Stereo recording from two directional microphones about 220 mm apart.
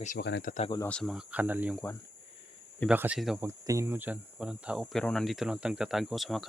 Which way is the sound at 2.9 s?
5° right (ahead or behind).